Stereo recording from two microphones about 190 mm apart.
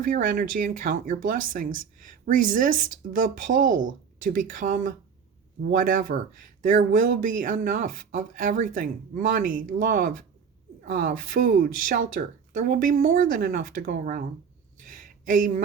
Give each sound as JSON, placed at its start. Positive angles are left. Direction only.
{"t": 0.0, "sound": "speech", "side_deg": -45}